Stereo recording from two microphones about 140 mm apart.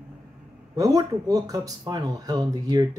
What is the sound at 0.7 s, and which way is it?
Speech, 25° right (ahead or behind).